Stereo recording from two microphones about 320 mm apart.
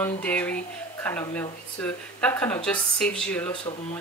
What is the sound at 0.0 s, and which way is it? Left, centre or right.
Speech, centre.